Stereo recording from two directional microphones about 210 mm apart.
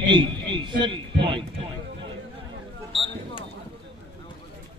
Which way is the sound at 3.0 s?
25° left (ahead or behind).